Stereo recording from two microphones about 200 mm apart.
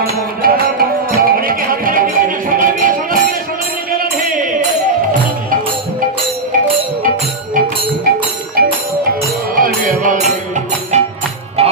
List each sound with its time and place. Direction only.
0.4 s music: 45° right (ahead or behind)
8.6 s music: 45° right (ahead or behind); by 11.7 s 30° right (ahead or behind)